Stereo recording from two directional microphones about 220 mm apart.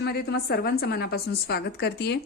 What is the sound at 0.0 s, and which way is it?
Speech, 45° left (ahead or behind).